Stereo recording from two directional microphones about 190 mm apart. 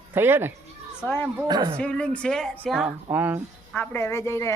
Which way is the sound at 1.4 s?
25° right (ahead or behind).